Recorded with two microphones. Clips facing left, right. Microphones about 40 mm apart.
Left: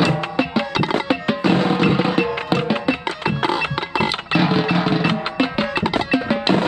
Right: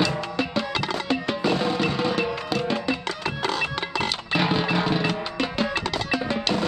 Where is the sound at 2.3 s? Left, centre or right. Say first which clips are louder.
Left 6 dB; left.